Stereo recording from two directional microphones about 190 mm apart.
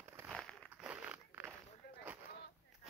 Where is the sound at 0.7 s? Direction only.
5° right (ahead or behind).